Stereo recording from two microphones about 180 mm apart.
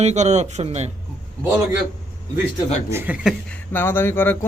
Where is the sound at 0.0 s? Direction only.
40° right (ahead or behind).